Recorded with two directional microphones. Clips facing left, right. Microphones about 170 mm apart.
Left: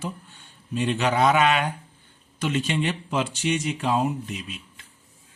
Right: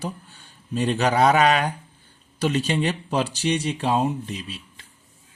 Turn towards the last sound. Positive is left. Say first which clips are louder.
# right 1 dB
turn(degrees=-30)  # may be behind; listen again after turning